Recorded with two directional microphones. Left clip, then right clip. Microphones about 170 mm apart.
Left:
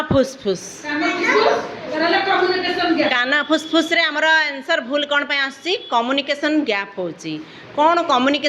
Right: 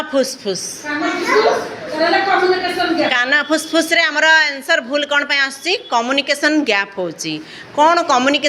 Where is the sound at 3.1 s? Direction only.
20° left (ahead or behind).